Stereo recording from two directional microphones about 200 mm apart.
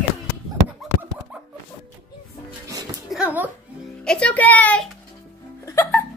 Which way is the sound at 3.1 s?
5° right (ahead or behind).